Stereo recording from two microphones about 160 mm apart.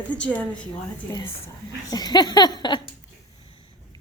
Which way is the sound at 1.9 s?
25° left (ahead or behind).